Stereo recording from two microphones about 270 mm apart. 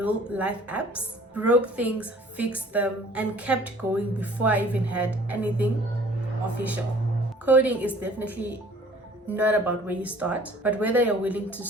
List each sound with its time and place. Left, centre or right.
0.0 s a woman's voice: centre
7.4 s a woman's voice: centre